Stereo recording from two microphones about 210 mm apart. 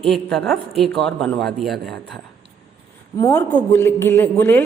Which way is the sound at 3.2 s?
20° left (ahead or behind).